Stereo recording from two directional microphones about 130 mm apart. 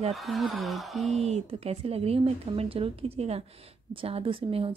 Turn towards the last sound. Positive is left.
turn(degrees=-45)  # may be behind; listen again after turning